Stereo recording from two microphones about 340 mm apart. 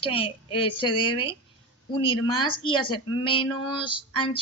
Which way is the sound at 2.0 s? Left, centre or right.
Centre.